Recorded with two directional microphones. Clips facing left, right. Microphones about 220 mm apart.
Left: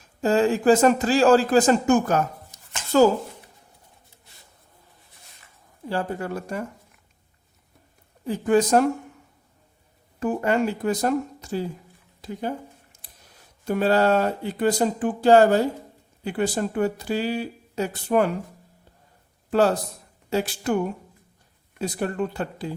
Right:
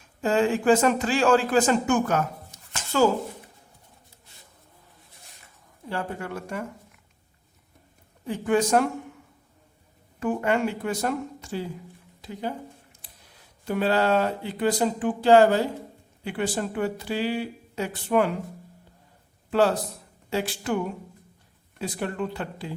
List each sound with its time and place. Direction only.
0.2 s speech: 40° left (ahead or behind)
5.9 s speech: 35° left (ahead or behind)
8.3 s speech: 40° left (ahead or behind)
10.2 s speech: 40° left (ahead or behind)
12.2 s a sound: 45° left (ahead or behind)
13.7 s speech: 45° left (ahead or behind)
19.5 s a man's voice: 40° left (ahead or behind)
21.8 s speech: 40° left (ahead or behind)